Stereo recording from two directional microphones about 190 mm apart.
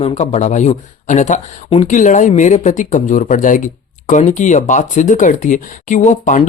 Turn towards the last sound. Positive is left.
turn(degrees=40)  # may be behind; listen again after turning